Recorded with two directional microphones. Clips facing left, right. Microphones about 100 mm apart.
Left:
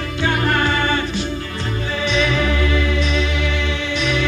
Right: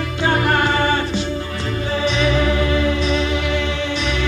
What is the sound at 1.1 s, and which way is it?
Music, 20° right (ahead or behind).